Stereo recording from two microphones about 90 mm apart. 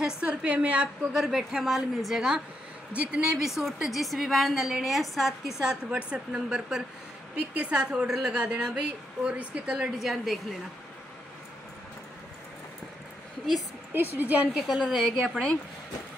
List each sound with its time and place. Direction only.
0.2 s a woman's voice: 15° right (ahead or behind)
5.6 s a woman's voice: 10° right (ahead or behind)
9.9 s a woman's voice: centre (ahead or behind)
14.1 s a woman's voice: 20° right (ahead or behind)
14.7 s a woman's voice: centre (ahead or behind)